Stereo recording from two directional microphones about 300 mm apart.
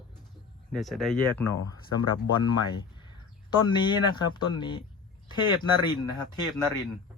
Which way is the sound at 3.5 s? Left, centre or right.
Centre.